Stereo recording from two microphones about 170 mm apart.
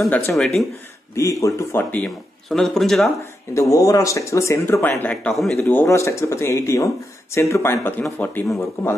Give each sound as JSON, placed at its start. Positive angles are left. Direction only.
{"t": 0.3, "sound": "a man's voice", "side_deg": 0}
{"t": 1.1, "sound": "speech", "side_deg": 20}
{"t": 3.5, "sound": "a man's voice", "side_deg": 20}